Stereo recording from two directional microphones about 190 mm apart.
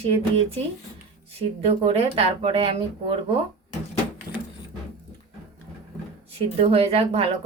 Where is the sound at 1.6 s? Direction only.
30° right (ahead or behind).